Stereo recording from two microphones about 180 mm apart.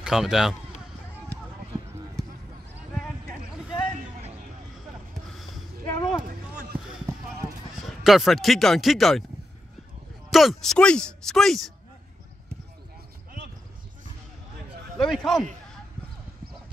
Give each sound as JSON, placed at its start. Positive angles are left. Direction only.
{"t": 0.0, "sound": "speech", "side_deg": -5}
{"t": 5.1, "sound": "a sound", "side_deg": 0}
{"t": 5.9, "sound": "a sound", "side_deg": 20}
{"t": 7.1, "sound": "clip-clop", "side_deg": -15}
{"t": 8.0, "sound": "speech", "side_deg": 0}
{"t": 10.3, "sound": "speech", "side_deg": 0}
{"t": 15.0, "sound": "speech", "side_deg": 0}